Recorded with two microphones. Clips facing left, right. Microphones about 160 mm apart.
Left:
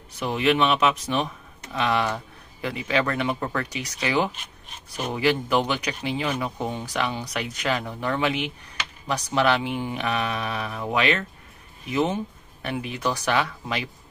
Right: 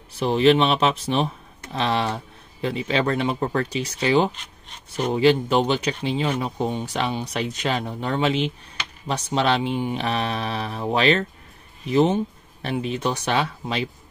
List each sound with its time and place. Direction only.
0.1 s speech: 30° right (ahead or behind)